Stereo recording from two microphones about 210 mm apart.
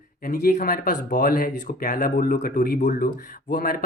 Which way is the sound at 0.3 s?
40° left (ahead or behind).